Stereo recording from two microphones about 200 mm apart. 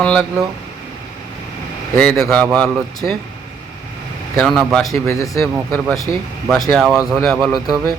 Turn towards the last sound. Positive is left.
turn(degrees=0)  # may be behind; listen again after turning